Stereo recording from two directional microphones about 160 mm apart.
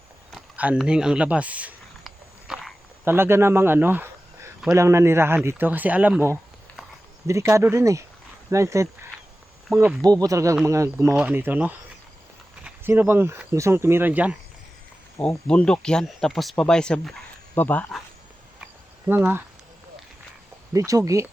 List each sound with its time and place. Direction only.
0.3 s speech: 10° right (ahead or behind)
2.0 s a sound: centre (ahead or behind)
3.0 s speech: 15° right (ahead or behind)
15.2 s speech: 5° left (ahead or behind)
18.6 s cricket: 10° right (ahead or behind)
20.7 s speech: 20° right (ahead or behind)